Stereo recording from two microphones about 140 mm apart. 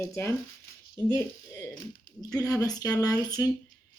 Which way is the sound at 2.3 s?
25° left (ahead or behind).